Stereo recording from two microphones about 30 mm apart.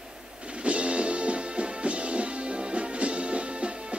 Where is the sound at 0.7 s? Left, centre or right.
Right.